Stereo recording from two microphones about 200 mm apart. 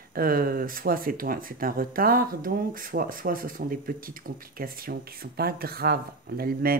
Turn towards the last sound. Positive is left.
turn(degrees=-50)  # may be behind; listen again after turning